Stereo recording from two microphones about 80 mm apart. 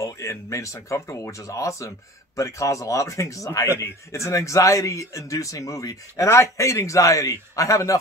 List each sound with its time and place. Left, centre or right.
0.0 s speech: left